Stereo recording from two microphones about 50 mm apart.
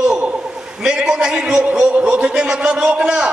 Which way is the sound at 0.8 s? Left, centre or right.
Centre.